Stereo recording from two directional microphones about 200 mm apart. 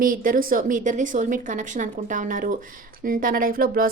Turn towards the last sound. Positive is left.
turn(degrees=-45)  # may be behind; listen again after turning